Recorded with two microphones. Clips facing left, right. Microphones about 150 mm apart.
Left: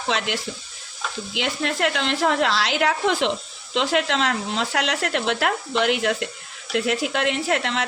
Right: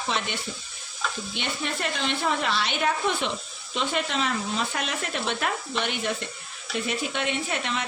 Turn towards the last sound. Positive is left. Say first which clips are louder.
# left 6 dB
turn(degrees=90)